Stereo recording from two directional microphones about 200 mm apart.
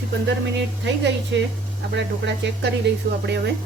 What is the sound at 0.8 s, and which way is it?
Speech, 60° right (ahead or behind).